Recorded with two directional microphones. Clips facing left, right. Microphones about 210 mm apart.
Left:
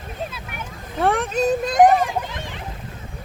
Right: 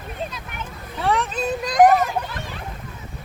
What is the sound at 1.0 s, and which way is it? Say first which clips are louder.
Speech: left 3 dB; 50° left (ahead or behind).